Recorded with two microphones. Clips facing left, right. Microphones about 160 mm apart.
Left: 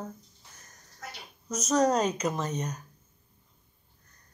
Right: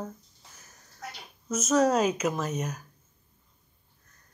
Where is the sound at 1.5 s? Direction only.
5° right (ahead or behind).